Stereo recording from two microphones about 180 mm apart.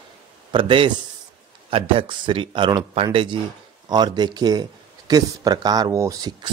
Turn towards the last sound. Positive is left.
turn(degrees=-20)  # may be behind; listen again after turning